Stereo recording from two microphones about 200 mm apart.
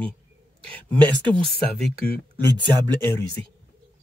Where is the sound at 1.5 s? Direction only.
5° left (ahead or behind).